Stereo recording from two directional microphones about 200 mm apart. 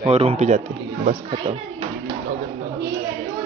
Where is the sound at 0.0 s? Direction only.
30° right (ahead or behind).